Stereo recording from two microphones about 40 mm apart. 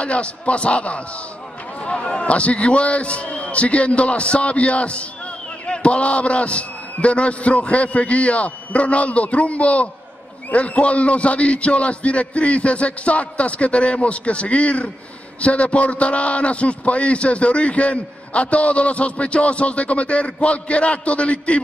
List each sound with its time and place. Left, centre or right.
0.0 s a man's voice: left